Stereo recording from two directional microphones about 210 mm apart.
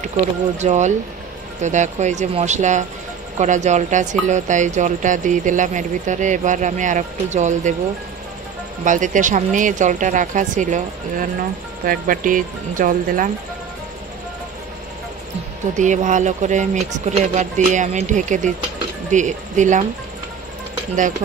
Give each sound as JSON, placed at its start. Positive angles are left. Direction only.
{"t": 0.6, "sound": "speech", "side_deg": -35}
{"t": 8.8, "sound": "speech", "side_deg": -40}
{"t": 15.8, "sound": "speech", "side_deg": -35}